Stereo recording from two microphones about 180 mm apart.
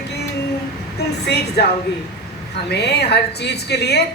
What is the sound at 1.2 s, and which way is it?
Speech, 65° left (ahead or behind).